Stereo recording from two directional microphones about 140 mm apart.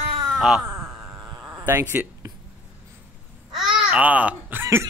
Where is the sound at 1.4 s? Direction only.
20° right (ahead or behind).